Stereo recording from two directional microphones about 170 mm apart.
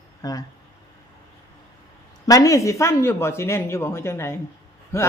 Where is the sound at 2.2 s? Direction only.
20° left (ahead or behind).